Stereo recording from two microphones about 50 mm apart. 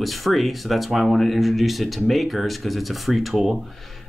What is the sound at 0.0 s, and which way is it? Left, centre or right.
Speech, centre.